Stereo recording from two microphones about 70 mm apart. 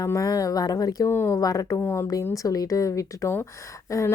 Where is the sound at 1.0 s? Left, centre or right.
Left.